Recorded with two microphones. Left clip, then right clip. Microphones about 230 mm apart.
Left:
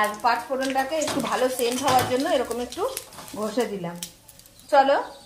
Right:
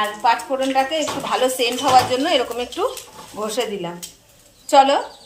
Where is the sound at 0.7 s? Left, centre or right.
Left.